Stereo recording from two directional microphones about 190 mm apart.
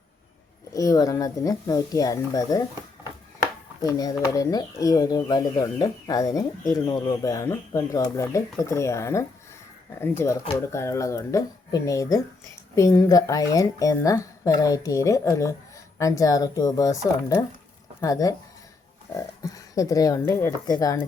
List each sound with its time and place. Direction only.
0.7 s speech: 20° left (ahead or behind)